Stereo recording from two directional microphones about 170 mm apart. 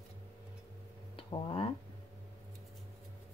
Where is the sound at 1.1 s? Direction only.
30° left (ahead or behind).